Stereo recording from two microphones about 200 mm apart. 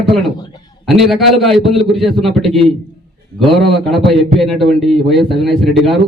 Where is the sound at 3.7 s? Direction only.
Centre (ahead or behind).